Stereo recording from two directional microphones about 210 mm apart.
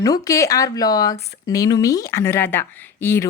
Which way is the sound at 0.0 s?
15° left (ahead or behind).